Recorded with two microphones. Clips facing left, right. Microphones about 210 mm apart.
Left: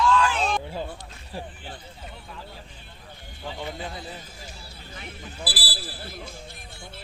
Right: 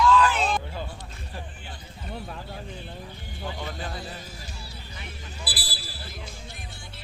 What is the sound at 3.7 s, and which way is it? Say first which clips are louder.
Music: left 1 dB; 25° left (ahead or behind).